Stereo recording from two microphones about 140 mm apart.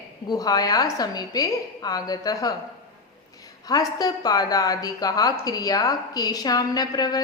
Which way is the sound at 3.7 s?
25° left (ahead or behind).